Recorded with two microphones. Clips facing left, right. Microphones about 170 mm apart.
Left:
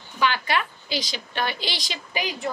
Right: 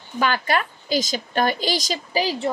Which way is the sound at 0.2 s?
45° right (ahead or behind).